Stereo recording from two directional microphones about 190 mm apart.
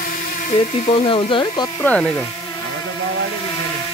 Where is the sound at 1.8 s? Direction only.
5° left (ahead or behind).